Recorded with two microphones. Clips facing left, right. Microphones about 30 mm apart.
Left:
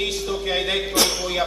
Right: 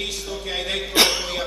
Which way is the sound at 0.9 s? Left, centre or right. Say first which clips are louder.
Right 6 dB; right.